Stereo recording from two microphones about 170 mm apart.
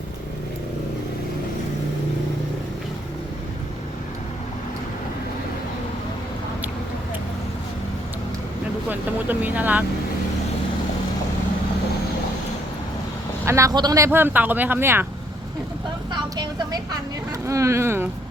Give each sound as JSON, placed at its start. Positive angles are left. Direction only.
{"t": 8.9, "sound": "speech", "side_deg": -10}
{"t": 13.4, "sound": "speech", "side_deg": -15}
{"t": 16.1, "sound": "speech", "side_deg": -25}